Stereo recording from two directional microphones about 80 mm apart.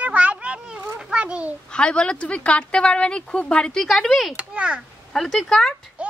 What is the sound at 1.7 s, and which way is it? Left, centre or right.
A woman's voice, centre.